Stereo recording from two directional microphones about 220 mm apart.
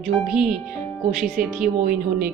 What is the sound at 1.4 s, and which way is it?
Speech, 40° right (ahead or behind).